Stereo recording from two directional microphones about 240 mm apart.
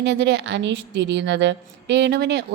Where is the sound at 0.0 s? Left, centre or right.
Right.